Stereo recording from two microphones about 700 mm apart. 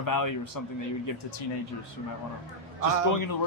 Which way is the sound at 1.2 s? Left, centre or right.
Left.